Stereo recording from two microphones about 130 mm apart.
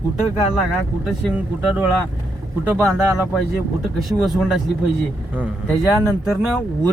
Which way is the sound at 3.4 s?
Centre (ahead or behind).